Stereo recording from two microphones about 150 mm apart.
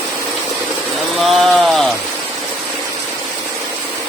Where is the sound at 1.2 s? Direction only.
Centre (ahead or behind).